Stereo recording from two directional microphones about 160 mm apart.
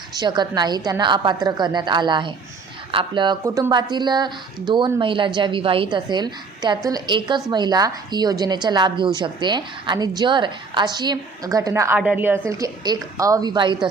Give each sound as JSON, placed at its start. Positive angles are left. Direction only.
{"t": 0.2, "sound": "speech", "side_deg": -25}
{"t": 3.4, "sound": "speech", "side_deg": -20}
{"t": 12.5, "sound": "speech", "side_deg": -20}